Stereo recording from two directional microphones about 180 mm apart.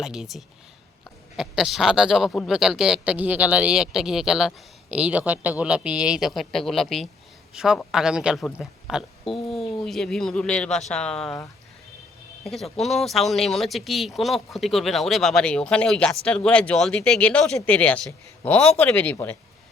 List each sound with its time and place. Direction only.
0.0 s speech: 5° right (ahead or behind)
12.5 s speech: centre (ahead or behind)